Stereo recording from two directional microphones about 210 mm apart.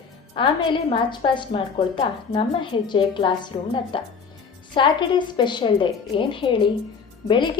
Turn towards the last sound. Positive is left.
turn(degrees=20)  # may be behind; listen again after turning